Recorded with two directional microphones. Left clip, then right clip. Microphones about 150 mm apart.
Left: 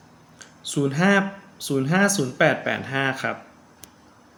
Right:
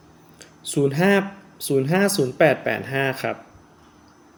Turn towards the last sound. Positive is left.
turn(degrees=-40)  # may be behind; listen again after turning